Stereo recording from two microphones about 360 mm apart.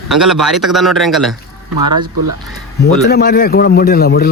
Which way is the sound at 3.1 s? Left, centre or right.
Left.